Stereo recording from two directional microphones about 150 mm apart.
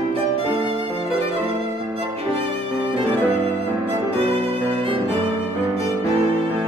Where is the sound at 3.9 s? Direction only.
40° right (ahead or behind).